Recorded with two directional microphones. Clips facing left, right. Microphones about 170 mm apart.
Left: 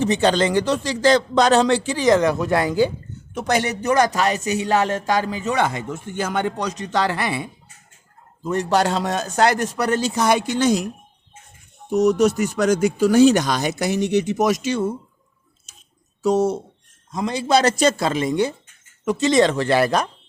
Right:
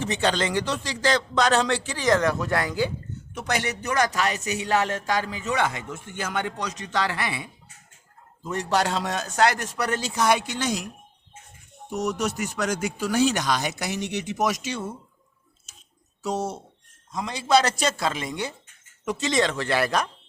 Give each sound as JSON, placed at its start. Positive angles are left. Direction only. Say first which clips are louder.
{"t": 0.0, "sound": "speech", "louder": "left 7 dB", "side_deg": 35}
{"t": 11.9, "sound": "speech", "louder": "left 10 dB", "side_deg": 40}
{"t": 16.2, "sound": "speech", "louder": "left 10 dB", "side_deg": 55}